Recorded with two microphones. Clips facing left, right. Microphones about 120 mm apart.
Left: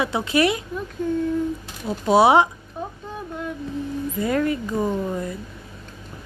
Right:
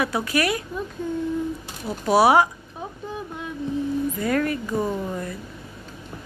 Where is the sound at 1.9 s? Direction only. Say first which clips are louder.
Left 2 dB; 20° left (ahead or behind).